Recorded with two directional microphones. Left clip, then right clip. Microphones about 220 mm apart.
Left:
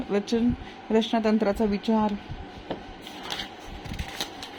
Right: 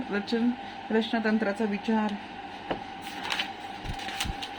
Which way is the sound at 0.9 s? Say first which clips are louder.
Left 4 dB; 25° left (ahead or behind).